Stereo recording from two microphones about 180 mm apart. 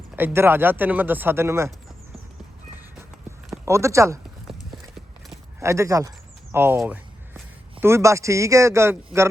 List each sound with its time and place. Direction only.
0.2 s a man's voice: 10° right (ahead or behind)
3.7 s a man's voice: 15° right (ahead or behind)
4.4 s clip-clop: centre (ahead or behind)
5.5 s a man's voice: 15° right (ahead or behind)